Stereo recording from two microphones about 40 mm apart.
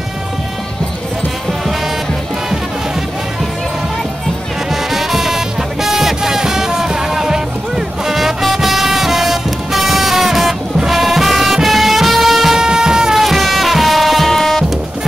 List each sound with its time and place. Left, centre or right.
4.9 s music: centre
12.5 s music: centre
13.2 s music: centre